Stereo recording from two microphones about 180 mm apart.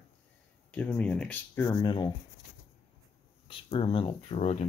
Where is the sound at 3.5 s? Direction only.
30° left (ahead or behind).